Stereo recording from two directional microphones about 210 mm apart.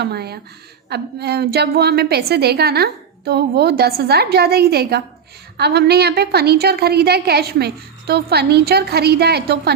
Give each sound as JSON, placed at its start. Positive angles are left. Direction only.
{"t": 0.0, "sound": "a woman's voice", "side_deg": -50}